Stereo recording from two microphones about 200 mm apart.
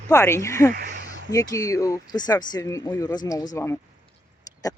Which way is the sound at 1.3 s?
15° left (ahead or behind).